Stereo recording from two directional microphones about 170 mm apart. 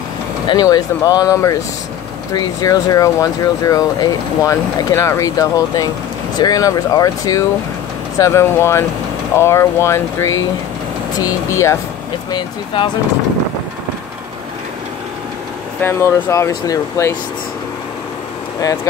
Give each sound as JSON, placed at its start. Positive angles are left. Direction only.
{"t": 0.5, "sound": "speech", "side_deg": 20}
{"t": 15.8, "sound": "speech", "side_deg": 15}